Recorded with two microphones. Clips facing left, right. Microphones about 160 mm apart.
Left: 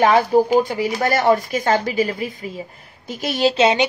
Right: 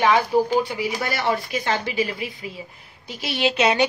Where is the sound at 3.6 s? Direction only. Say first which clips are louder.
Left 2 dB; 25° left (ahead or behind).